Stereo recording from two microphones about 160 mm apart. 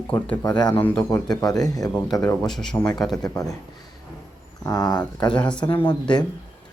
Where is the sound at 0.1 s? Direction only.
10° left (ahead or behind).